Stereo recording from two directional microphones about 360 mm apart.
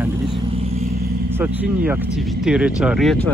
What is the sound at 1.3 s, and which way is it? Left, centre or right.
Speech, centre.